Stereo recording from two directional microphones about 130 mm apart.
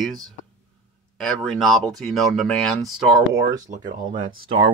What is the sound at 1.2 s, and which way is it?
Speech, 5° left (ahead or behind).